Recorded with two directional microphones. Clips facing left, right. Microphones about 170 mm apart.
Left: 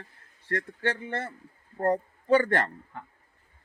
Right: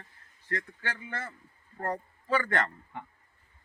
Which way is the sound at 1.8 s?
45° left (ahead or behind).